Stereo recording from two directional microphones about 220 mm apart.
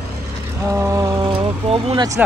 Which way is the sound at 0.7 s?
15° right (ahead or behind).